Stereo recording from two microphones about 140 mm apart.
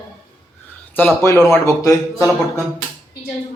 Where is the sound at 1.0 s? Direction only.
15° left (ahead or behind).